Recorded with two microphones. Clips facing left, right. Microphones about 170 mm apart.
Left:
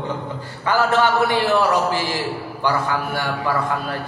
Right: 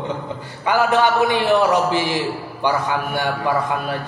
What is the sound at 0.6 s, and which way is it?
A woman's voice, 15° right (ahead or behind).